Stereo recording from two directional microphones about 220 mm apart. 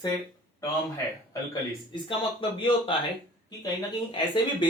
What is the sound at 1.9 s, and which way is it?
Speech, 20° left (ahead or behind).